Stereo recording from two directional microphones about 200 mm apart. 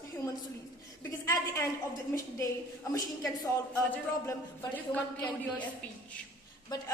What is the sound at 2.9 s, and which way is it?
A woman's voice, 15° left (ahead or behind).